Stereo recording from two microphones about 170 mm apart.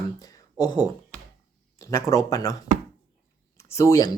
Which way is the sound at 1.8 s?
15° left (ahead or behind).